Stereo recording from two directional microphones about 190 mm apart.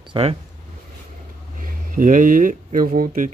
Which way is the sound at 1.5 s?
45° right (ahead or behind).